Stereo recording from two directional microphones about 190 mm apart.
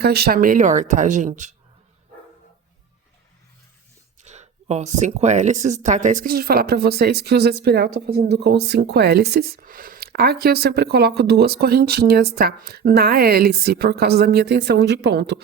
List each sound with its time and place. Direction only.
0.0 s speech: 55° right (ahead or behind); by 1.5 s 40° right (ahead or behind)
4.2 s speech: 35° right (ahead or behind); by 15.4 s 60° right (ahead or behind)